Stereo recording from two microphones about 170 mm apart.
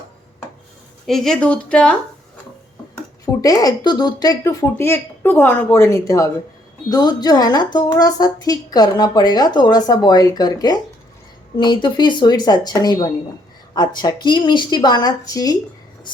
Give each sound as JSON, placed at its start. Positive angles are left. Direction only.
{"t": 1.0, "sound": "speech", "side_deg": 0}
{"t": 3.4, "sound": "speech", "side_deg": 20}